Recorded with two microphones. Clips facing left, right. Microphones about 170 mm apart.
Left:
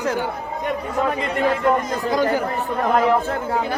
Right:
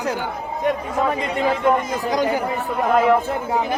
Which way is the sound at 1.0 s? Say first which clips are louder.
Even; centre (ahead or behind).